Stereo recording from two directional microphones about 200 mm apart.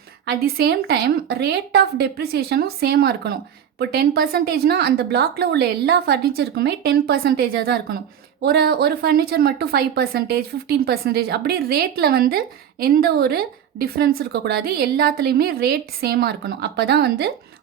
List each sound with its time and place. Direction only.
0.3 s a woman's voice: 50° right (ahead or behind)